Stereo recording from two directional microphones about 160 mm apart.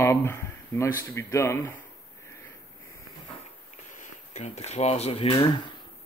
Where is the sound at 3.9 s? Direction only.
50° left (ahead or behind).